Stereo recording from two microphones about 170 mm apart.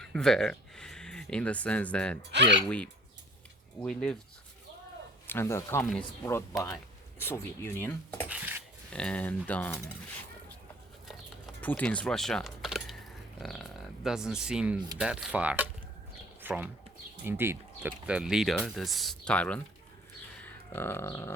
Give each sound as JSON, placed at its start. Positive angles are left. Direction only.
{"t": 0.0, "sound": "speech", "side_deg": 5}
{"t": 2.3, "sound": "speech", "side_deg": -90}
{"t": 2.6, "sound": "cutlery", "side_deg": 5}
{"t": 3.8, "sound": "speech", "side_deg": 5}
{"t": 5.3, "sound": "cutlery", "side_deg": 15}
{"t": 7.2, "sound": "cutlery", "side_deg": 15}
{"t": 8.3, "sound": "speech", "side_deg": -10}
{"t": 8.9, "sound": "cutlery", "side_deg": 5}
{"t": 11.6, "sound": "speech", "side_deg": 10}
{"t": 20.4, "sound": "a sound", "side_deg": 15}